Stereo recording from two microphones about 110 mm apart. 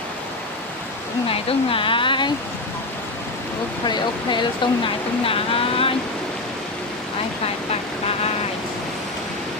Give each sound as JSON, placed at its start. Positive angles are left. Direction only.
{"t": 1.3, "sound": "speech", "side_deg": 55}
{"t": 3.8, "sound": "speech", "side_deg": 45}
{"t": 5.2, "sound": "a sound", "side_deg": 55}